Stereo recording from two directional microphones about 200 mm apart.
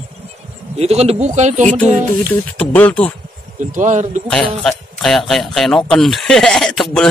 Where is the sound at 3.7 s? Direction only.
40° right (ahead or behind).